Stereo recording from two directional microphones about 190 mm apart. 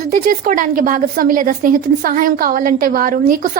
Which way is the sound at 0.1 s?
45° right (ahead or behind).